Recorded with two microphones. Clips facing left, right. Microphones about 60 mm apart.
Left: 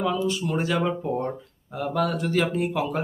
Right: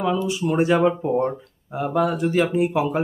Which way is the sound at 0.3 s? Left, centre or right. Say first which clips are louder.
Right 6 dB; centre.